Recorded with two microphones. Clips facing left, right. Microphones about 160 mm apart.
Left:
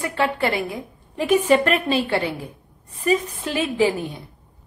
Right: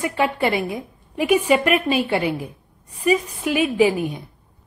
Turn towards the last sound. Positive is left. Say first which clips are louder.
# right 3 dB
turn(degrees=-20)  # may be behind; listen again after turning